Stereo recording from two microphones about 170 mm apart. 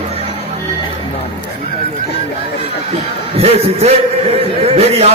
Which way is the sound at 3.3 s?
40° right (ahead or behind).